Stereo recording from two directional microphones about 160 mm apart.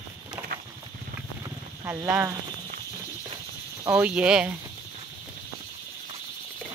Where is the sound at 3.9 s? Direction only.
5° right (ahead or behind).